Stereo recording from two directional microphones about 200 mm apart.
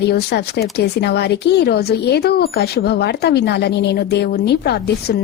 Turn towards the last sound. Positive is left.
turn(degrees=55)  # may be behind; listen again after turning